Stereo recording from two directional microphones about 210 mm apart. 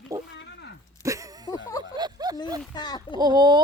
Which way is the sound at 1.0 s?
15° right (ahead or behind).